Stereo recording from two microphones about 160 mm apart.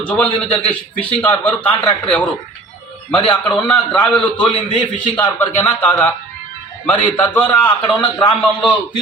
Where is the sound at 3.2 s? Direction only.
30° left (ahead or behind).